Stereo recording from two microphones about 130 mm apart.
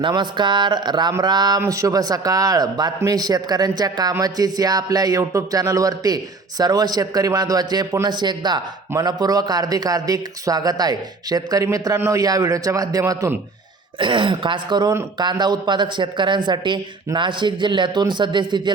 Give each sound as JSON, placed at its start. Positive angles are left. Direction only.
{"t": 0.0, "sound": "a man's voice", "side_deg": -35}
{"t": 14.0, "sound": "speech", "side_deg": -40}